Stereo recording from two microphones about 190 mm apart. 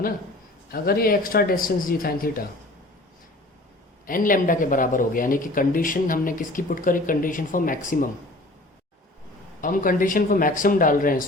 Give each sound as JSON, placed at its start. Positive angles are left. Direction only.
{"t": 0.7, "sound": "speech", "side_deg": 50}
{"t": 4.0, "sound": "speech", "side_deg": 45}
{"t": 9.6, "sound": "speech", "side_deg": 45}